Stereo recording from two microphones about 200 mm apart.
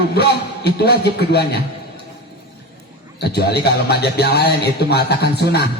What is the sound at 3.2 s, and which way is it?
A man's voice, 55° left (ahead or behind).